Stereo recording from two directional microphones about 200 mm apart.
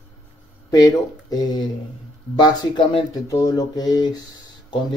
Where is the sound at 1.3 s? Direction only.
20° left (ahead or behind).